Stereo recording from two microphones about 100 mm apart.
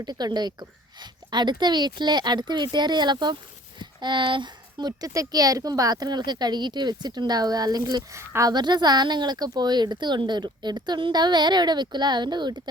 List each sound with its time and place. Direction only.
0.0 s speech: 45° right (ahead or behind)
8.2 s speech: 25° right (ahead or behind)
8.4 s speech: 45° right (ahead or behind)